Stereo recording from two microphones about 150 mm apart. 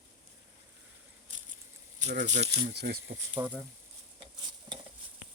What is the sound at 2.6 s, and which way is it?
Speech, 85° right.